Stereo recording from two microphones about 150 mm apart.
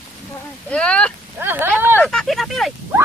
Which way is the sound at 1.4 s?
15° right (ahead or behind).